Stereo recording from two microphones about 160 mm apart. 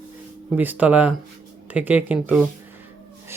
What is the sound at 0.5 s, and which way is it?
Speech, 10° right (ahead or behind).